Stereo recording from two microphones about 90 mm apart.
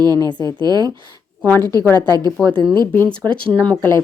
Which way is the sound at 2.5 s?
65° right (ahead or behind).